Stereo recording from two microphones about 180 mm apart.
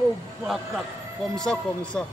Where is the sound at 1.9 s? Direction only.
5° left (ahead or behind).